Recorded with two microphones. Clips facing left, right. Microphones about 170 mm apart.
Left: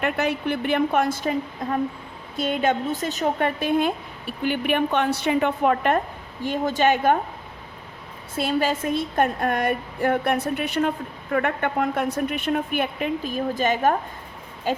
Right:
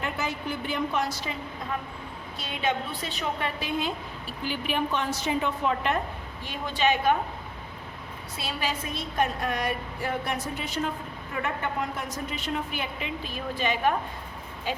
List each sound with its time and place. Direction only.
0.0 s a woman's voice: 65° left (ahead or behind)
8.4 s a woman's voice: 50° left (ahead or behind)